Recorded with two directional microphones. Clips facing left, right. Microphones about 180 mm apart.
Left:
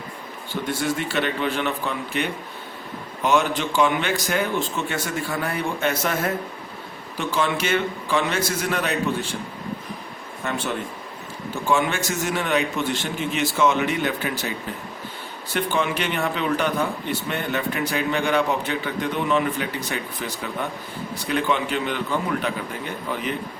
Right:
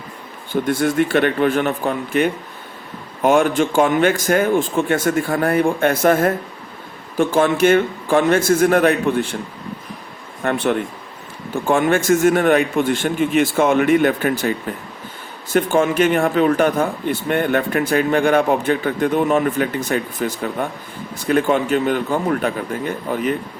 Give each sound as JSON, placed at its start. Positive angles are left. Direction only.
{"t": 0.5, "sound": "speech", "side_deg": -50}
{"t": 10.4, "sound": "a man's voice", "side_deg": -60}